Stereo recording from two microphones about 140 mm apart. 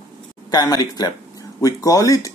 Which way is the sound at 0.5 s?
30° left (ahead or behind).